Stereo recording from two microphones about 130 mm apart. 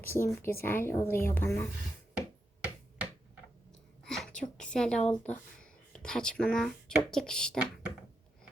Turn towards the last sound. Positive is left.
turn(degrees=5)  # may be behind; listen again after turning